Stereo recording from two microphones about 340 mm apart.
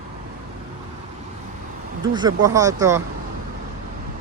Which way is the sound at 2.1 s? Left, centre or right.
Centre.